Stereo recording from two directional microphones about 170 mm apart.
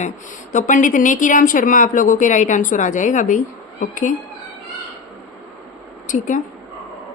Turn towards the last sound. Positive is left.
turn(degrees=50)  # may be behind; listen again after turning